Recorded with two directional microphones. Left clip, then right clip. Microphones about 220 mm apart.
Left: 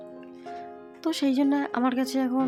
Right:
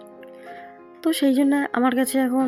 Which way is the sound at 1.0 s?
10° right (ahead or behind).